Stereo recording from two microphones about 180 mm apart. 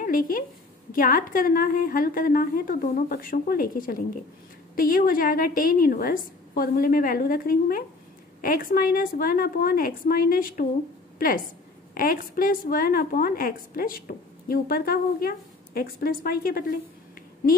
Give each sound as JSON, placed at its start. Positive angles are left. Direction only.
{"t": 0.0, "sound": "a woman's voice", "side_deg": 50}